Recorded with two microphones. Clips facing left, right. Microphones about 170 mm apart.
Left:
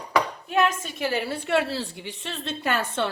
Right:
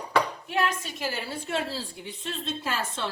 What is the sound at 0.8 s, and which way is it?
A woman's voice, 60° left (ahead or behind).